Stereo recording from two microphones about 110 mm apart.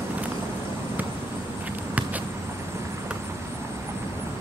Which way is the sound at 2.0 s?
15° right (ahead or behind).